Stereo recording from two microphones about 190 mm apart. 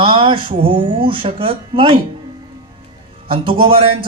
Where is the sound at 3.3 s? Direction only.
30° right (ahead or behind).